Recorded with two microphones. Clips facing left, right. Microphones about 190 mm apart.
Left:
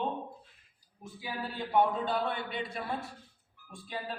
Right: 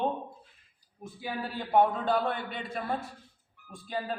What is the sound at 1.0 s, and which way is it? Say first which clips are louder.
A man's voice: right 3 dB; 55° right (ahead or behind).